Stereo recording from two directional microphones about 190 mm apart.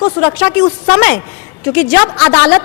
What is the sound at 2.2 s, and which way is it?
Speech, 10° left (ahead or behind).